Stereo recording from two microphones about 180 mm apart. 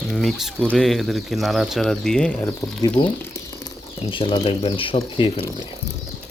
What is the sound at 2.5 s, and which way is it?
Speech, 20° left (ahead or behind).